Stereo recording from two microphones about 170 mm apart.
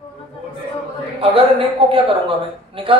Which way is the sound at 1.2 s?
35° right (ahead or behind).